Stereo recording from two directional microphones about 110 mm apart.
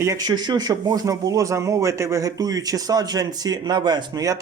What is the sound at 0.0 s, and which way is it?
Speech, 35° right (ahead or behind).